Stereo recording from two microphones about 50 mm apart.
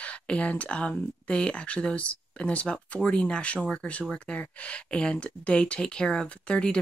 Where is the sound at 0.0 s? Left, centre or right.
Left.